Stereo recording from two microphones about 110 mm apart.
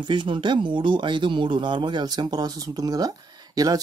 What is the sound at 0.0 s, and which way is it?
Speech, 45° right (ahead or behind).